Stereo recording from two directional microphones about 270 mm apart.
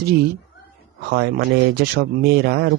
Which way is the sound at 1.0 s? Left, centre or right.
Right.